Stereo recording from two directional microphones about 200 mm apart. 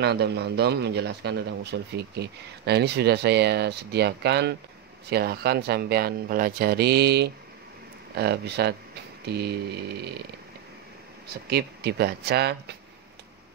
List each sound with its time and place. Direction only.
0.0 s speech: 55° right (ahead or behind)
11.2 s speech: 55° right (ahead or behind)